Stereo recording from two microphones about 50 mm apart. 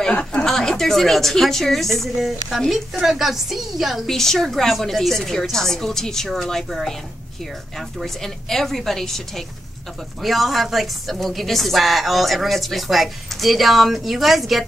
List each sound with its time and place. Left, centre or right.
0.1 s speech: left
0.5 s a woman's voice: centre
4.0 s a woman's voice: centre
8.0 s a woman's voice: centre
10.2 s a woman's voice: centre